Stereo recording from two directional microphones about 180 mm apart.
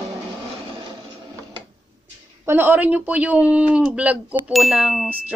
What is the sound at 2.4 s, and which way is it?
Speech, 10° right (ahead or behind).